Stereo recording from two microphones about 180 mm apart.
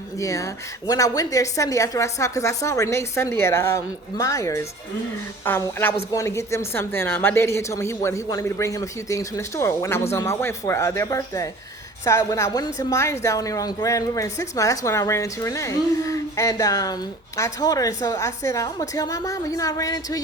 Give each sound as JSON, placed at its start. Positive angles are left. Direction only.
{"t": 0.2, "sound": "a woman's voice", "side_deg": 15}